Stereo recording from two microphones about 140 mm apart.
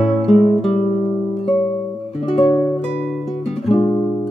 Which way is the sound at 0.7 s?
40° left (ahead or behind).